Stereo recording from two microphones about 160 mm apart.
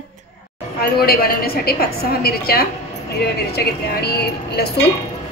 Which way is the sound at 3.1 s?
85° left.